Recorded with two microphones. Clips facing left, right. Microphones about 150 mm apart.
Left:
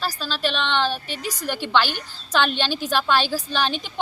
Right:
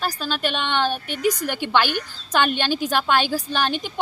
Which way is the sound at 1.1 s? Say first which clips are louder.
Right 6 dB; 55° right (ahead or behind).